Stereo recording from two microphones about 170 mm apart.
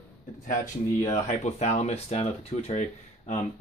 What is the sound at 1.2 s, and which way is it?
Speech, 40° left (ahead or behind).